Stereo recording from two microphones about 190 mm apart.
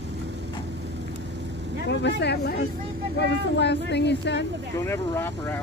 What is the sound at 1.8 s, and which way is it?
Speech, 65° left (ahead or behind).